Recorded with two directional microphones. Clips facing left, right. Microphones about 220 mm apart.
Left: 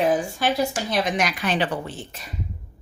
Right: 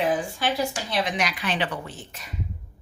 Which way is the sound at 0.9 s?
45° left (ahead or behind).